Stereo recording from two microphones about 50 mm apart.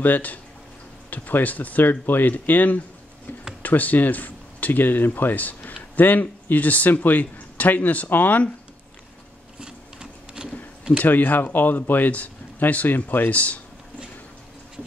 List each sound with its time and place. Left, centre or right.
0.0 s a man's voice: left
9.6 s printer: centre
11.0 s a man's voice: left
13.3 s speech: left